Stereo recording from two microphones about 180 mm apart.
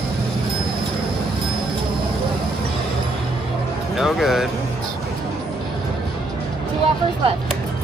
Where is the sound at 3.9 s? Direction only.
Centre (ahead or behind).